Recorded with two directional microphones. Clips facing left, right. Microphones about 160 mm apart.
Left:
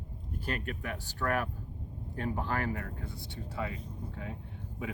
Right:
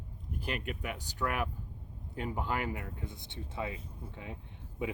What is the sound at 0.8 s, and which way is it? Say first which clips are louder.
Speech: left 1 dB; 15° right (ahead or behind).